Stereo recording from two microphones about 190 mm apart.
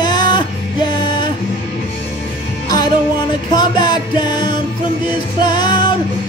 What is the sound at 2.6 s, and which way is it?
Music, 20° left (ahead or behind).